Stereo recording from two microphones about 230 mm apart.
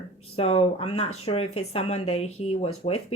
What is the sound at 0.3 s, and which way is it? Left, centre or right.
Speech, left.